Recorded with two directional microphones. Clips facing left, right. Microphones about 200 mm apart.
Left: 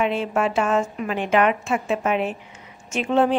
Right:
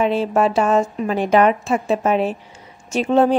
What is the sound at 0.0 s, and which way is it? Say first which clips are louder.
Speech: right 5 dB; 35° right (ahead or behind).